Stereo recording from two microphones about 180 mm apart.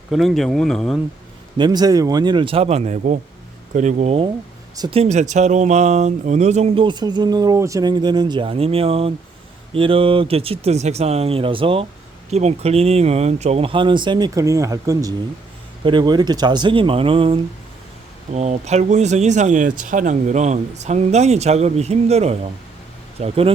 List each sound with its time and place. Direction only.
0.1 s speech: centre (ahead or behind)
1.5 s speech: 25° right (ahead or behind)
18.3 s speech: 40° right (ahead or behind)